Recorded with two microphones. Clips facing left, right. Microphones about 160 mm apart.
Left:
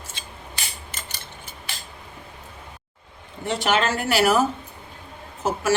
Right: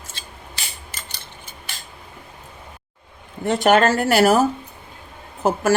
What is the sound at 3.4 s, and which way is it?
Speech, 45° right (ahead or behind).